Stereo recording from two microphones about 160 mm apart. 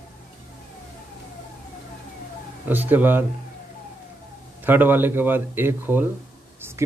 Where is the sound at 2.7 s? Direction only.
10° right (ahead or behind).